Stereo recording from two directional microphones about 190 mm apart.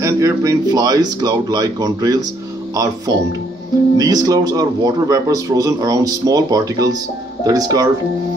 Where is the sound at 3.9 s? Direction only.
20° right (ahead or behind).